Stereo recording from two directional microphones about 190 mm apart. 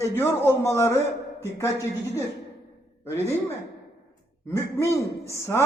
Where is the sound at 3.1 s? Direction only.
15° right (ahead or behind).